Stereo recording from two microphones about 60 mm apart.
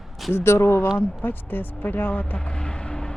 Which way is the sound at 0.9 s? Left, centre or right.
Left.